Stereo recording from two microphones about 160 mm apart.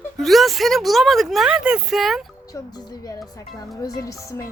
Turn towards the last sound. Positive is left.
turn(degrees=20)  # may be behind; listen again after turning